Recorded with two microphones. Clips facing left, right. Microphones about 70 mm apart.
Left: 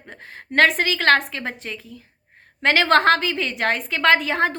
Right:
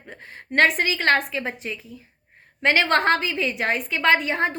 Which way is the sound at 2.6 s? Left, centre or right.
Left.